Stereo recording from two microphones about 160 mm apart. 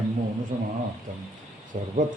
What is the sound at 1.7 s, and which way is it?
Speech, 50° right (ahead or behind).